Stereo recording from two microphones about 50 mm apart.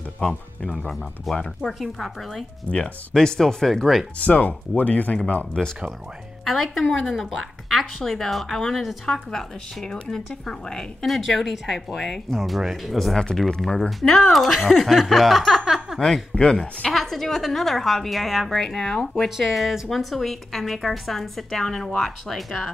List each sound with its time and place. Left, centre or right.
0.2 s speech: left
1.3 s a woman's voice: centre
2.7 s speech: centre
4.2 s speech: left
5.6 s speech: centre
6.4 s a woman's voice: centre
11.1 s a woman's voice: centre
16.0 s speech: centre
16.9 s a woman's voice: centre
19.2 s a woman's voice: centre